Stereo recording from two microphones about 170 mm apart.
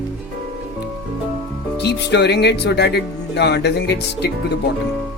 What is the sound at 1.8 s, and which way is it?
Speech, 80° left.